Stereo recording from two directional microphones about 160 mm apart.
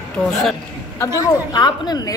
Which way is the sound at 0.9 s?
25° left (ahead or behind).